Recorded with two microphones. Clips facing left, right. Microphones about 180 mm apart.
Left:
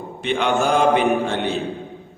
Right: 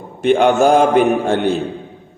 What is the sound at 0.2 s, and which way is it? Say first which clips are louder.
A man's voice: right 8 dB; 45° right (ahead or behind).